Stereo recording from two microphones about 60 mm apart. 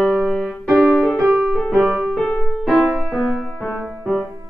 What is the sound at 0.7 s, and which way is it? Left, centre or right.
Music, centre.